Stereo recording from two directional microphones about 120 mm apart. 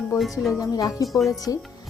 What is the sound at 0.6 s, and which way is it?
Speech, 30° left (ahead or behind).